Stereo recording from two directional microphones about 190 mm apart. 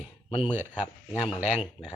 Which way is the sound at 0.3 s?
30° left (ahead or behind).